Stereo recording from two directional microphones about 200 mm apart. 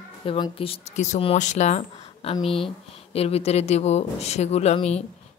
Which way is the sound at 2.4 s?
Centre (ahead or behind).